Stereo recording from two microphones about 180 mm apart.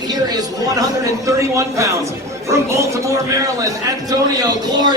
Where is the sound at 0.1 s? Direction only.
20° right (ahead or behind).